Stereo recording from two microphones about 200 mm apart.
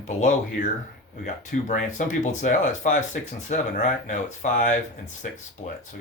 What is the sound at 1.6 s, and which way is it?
Speech, 40° left (ahead or behind).